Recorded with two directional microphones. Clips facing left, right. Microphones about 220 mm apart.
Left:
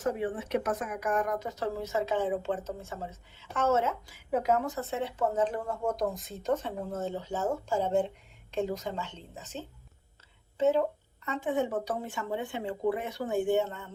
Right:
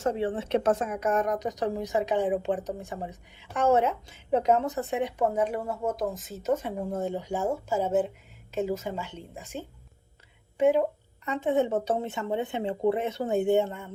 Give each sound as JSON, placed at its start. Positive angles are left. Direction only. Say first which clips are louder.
{"t": 0.0, "sound": "a woman's voice", "louder": "right 3 dB", "side_deg": -25}